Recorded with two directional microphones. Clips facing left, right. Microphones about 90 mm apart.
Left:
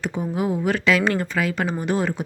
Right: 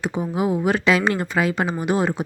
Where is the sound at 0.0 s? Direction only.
20° right (ahead or behind).